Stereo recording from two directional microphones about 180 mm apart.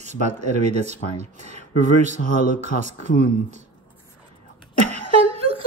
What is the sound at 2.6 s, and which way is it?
Speech, 40° right (ahead or behind).